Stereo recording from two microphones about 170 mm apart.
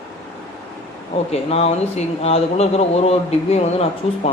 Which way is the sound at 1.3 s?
35° left (ahead or behind).